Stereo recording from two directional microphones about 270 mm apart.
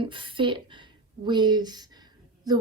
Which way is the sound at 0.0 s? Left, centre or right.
Centre.